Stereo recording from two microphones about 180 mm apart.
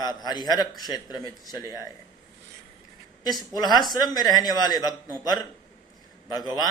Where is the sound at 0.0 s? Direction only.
25° left (ahead or behind).